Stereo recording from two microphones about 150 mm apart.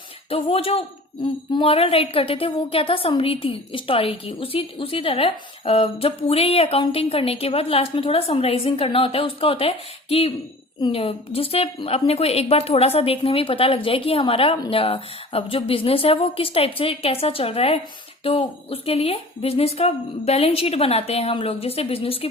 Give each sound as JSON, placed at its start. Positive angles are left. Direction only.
{"t": 0.3, "sound": "a woman's voice", "side_deg": 40}